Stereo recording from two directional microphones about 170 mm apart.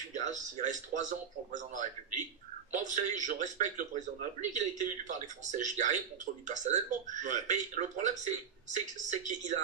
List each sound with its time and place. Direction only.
0.1 s speech: 45° right (ahead or behind)